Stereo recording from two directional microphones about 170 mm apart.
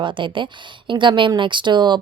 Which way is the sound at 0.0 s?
30° right (ahead or behind).